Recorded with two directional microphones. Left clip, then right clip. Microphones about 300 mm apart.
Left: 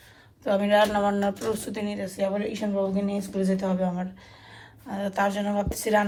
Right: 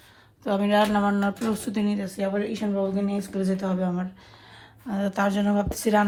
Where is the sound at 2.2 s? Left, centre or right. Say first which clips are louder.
Left 1 dB; right.